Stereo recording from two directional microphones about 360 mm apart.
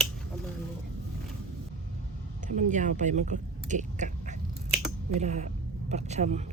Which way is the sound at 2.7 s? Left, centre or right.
Right.